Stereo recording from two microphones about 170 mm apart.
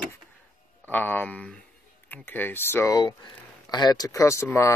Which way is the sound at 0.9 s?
10° left (ahead or behind).